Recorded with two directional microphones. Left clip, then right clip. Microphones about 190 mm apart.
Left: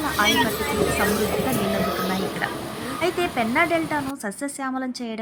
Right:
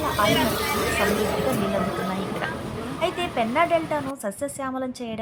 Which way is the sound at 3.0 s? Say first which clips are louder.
Left 1 dB; 5° left (ahead or behind).